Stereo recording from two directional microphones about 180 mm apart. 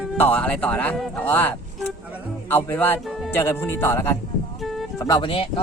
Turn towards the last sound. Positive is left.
turn(degrees=30)  # may be behind; listen again after turning